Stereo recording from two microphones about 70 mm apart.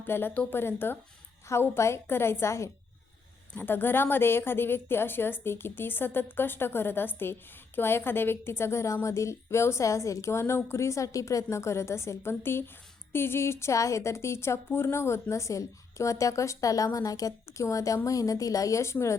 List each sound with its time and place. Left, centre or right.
0.0 s a woman's voice: left
3.5 s a woman's voice: left